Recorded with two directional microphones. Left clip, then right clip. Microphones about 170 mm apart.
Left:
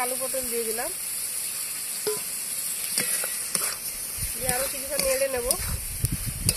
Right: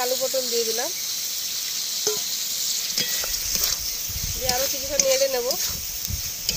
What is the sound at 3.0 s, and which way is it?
Stir, 5° left (ahead or behind).